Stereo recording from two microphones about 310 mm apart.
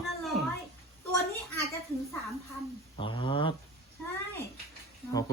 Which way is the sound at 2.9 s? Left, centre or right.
Centre.